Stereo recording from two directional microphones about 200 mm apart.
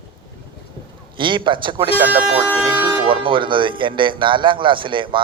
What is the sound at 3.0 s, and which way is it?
A man's voice, 25° right (ahead or behind).